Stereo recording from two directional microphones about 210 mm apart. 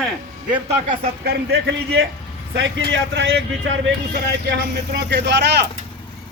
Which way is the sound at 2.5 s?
60° right (ahead or behind).